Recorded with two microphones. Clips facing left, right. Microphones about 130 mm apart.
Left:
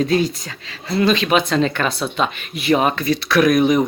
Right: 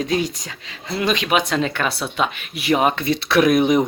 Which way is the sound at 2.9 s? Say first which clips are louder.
Left 1 dB; 25° right (ahead or behind).